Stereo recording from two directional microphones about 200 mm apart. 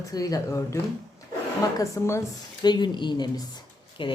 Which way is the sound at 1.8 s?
15° left (ahead or behind).